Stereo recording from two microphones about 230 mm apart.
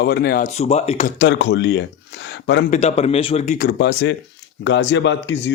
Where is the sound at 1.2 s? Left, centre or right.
Left.